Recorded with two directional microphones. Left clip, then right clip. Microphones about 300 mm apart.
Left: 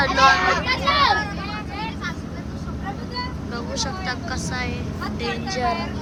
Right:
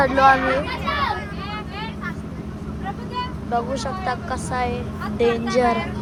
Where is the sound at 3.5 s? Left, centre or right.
Centre.